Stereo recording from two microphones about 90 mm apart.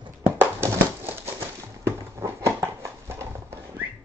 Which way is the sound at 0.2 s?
25° right (ahead or behind).